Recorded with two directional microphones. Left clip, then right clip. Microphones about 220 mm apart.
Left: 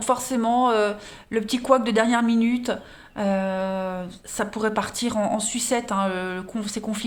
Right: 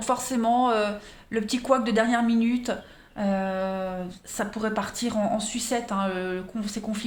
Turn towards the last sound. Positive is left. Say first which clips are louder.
# left 3 dB
turn(degrees=30)  # may be behind; listen again after turning